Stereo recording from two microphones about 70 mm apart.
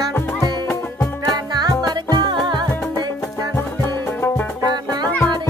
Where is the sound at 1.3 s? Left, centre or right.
Right.